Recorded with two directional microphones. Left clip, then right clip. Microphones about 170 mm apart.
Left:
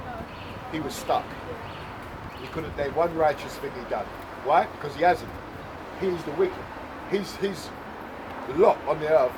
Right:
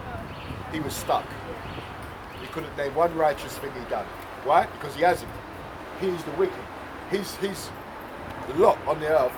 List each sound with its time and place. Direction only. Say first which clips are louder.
0.7 s speech: even; 30° right (ahead or behind)
2.7 s speech: right 1 dB; 30° right (ahead or behind)
8.5 s speech: even; 30° right (ahead or behind)